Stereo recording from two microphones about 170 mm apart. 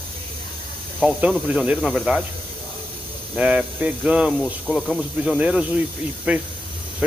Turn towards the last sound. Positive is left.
turn(degrees=-10)  # may be behind; listen again after turning